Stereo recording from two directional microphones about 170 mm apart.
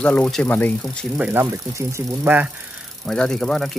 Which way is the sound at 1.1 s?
5° right (ahead or behind).